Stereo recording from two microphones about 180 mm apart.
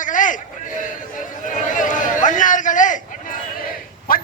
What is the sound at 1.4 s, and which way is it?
A man's voice, 45° left (ahead or behind).